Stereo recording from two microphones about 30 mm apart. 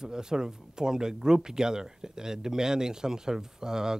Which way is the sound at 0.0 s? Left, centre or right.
Right.